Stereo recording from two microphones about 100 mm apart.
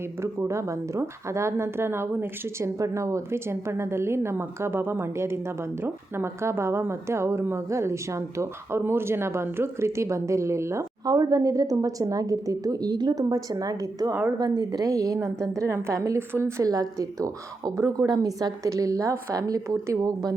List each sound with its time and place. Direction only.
0.2 s a woman's voice: 30° right (ahead or behind)